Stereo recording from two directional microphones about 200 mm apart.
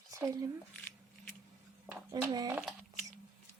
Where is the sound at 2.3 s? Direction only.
20° right (ahead or behind).